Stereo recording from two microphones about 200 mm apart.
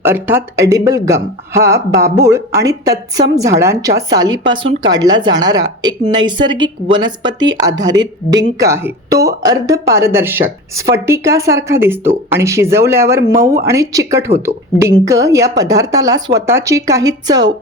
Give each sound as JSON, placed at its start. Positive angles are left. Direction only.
{"t": 0.0, "sound": "speech", "side_deg": -10}